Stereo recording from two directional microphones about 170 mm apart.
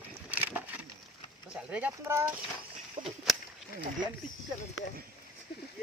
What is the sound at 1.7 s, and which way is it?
Speech, 10° right (ahead or behind).